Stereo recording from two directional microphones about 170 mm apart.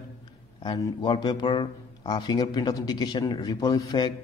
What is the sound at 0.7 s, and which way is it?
A man's voice, 25° left (ahead or behind).